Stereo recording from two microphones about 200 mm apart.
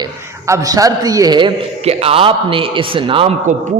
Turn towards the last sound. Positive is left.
turn(degrees=-25)  # may be behind; listen again after turning